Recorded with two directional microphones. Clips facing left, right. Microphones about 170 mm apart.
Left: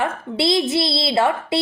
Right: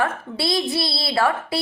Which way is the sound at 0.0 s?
25° left (ahead or behind).